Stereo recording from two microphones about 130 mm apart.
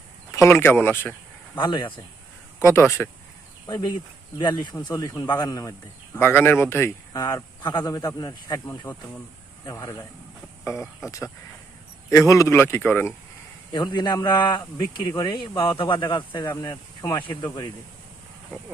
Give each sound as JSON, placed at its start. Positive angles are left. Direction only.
{"t": 0.3, "sound": "speech", "side_deg": 20}
{"t": 1.5, "sound": "speech", "side_deg": 35}
{"t": 2.6, "sound": "speech", "side_deg": 15}
{"t": 3.7, "sound": "speech", "side_deg": 35}
{"t": 7.2, "sound": "speech", "side_deg": 30}
{"t": 13.7, "sound": "speech", "side_deg": 35}